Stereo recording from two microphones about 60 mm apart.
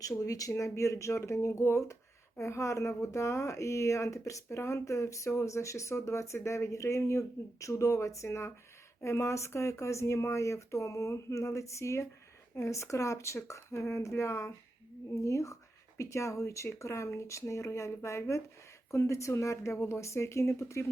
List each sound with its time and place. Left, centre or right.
0.0 s speech: left
0.5 s speech: left